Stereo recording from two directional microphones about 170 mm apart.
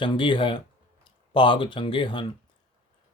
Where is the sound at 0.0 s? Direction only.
30° left (ahead or behind).